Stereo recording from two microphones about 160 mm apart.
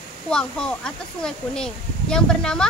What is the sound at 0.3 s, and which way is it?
Speech, 5° left (ahead or behind).